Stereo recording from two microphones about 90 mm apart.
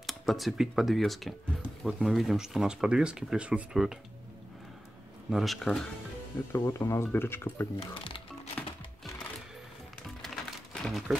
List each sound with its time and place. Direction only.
0.0 s speech: centre (ahead or behind)
5.3 s speech: centre (ahead or behind)
6.5 s speech: 30° left (ahead or behind)
7.8 s speech: 75° left (ahead or behind)
10.2 s a sound: 5° left (ahead or behind)